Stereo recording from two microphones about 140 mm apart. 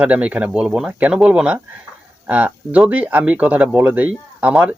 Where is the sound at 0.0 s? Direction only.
10° right (ahead or behind).